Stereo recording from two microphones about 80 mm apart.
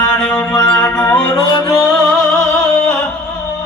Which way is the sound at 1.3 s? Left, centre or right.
Left.